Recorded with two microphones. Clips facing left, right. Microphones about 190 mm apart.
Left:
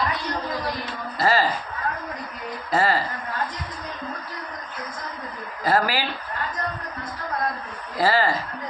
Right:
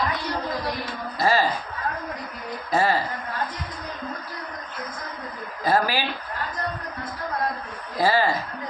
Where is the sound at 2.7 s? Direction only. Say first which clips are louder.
Even; 15° right (ahead or behind).